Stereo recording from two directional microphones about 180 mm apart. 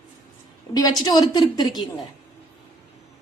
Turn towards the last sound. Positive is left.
turn(degrees=25)  # may be behind; listen again after turning